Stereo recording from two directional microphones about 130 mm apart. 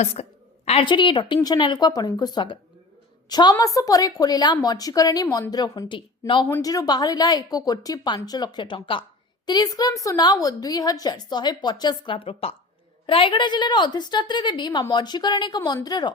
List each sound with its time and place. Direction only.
0.0 s a sound: 55° left (ahead or behind)
0.9 s a woman's voice: 40° left (ahead or behind)
6.6 s a woman's voice: 30° left (ahead or behind)